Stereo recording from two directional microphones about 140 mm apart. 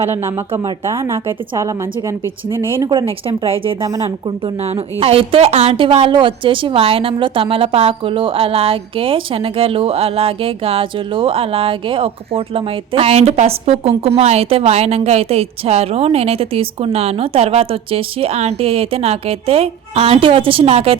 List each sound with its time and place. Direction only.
0.1 s a woman's voice: 20° right (ahead or behind)
2.9 s a woman's voice: 35° right (ahead or behind)